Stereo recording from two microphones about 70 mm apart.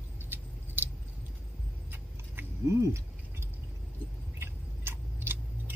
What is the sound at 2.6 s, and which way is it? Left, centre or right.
Keys jangling, right.